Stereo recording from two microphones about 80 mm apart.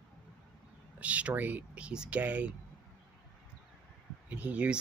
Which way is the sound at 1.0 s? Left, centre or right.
Centre.